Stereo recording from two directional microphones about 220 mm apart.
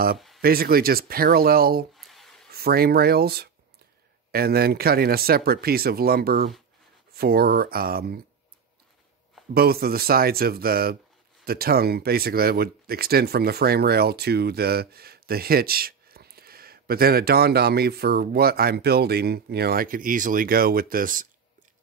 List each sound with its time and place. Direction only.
0.4 s speech: 45° right (ahead or behind)
2.0 s a sound: centre (ahead or behind)
2.5 s speech: 45° right (ahead or behind)
9.5 s speech: 45° right (ahead or behind)